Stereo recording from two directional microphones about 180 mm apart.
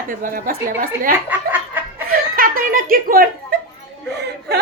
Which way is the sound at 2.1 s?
55° right (ahead or behind).